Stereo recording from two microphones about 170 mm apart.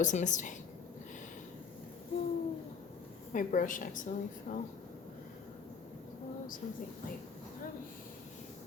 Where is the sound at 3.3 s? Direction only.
50° left (ahead or behind).